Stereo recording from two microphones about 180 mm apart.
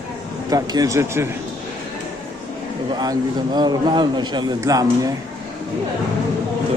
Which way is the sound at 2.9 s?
20° right (ahead or behind).